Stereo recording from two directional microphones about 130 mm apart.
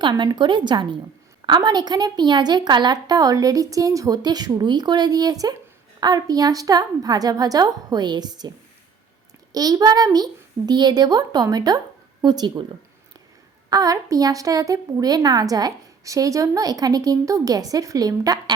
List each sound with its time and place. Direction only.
0.0 s a woman's voice: 35° right (ahead or behind)
13.7 s a woman's voice: 30° right (ahead or behind)